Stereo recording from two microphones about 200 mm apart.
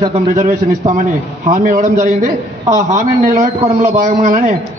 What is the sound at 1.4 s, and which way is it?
A man's voice, 40° right (ahead or behind).